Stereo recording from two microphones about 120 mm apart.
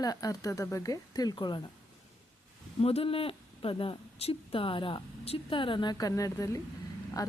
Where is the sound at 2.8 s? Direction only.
55° left (ahead or behind); by 7.3 s 30° left (ahead or behind).